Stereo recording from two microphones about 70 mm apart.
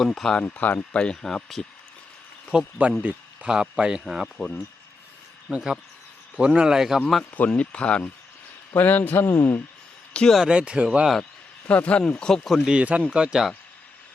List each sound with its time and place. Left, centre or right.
0.0 s speech: centre
0.4 s speech: left; by 1.6 s centre
2.5 s a man's voice: centre
4.0 s speech: centre
5.5 s a man's voice: centre
7.3 s a man's voice: left
10.1 s a sound: centre
10.4 s a man's voice: centre
11.0 s speech: centre
11.7 s speech: centre
12.6 s a man's voice: centre